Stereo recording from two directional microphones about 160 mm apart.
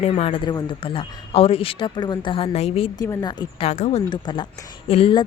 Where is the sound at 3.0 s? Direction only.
20° left (ahead or behind).